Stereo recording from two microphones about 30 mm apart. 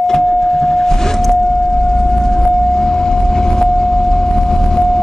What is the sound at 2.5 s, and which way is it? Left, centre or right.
Vehicle, centre.